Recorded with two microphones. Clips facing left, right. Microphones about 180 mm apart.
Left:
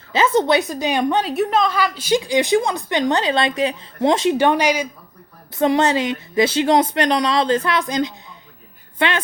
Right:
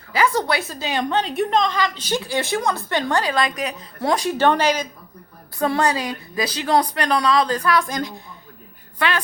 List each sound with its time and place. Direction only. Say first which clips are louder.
0.1 s a woman's voice: left 4 dB; 20° left (ahead or behind)